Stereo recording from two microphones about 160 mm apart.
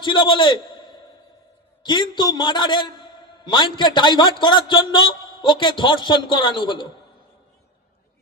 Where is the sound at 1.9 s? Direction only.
30° left (ahead or behind).